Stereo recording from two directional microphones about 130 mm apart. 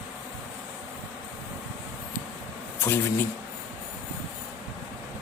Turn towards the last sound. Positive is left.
turn(degrees=20)  # may be behind; listen again after turning